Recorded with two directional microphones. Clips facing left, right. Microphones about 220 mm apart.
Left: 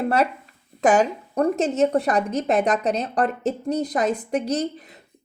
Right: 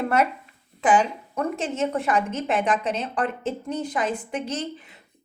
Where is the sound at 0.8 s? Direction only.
45° left (ahead or behind).